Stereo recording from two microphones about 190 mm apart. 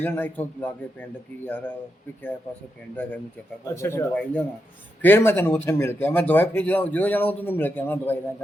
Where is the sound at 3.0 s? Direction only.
10° left (ahead or behind).